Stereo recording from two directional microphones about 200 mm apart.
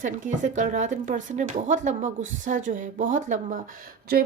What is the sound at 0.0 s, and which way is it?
Speech, 40° right (ahead or behind).